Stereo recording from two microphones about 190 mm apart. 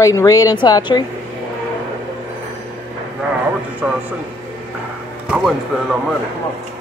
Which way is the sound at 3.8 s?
5° right (ahead or behind).